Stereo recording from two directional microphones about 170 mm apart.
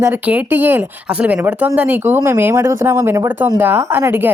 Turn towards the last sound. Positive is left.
turn(degrees=-15)  # may be behind; listen again after turning